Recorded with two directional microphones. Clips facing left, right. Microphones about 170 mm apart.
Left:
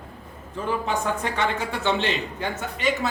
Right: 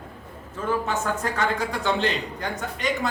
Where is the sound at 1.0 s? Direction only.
5° right (ahead or behind).